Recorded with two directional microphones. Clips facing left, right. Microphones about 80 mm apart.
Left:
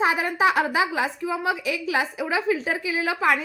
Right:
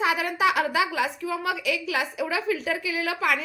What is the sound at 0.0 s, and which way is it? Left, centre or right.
A woman's voice, left.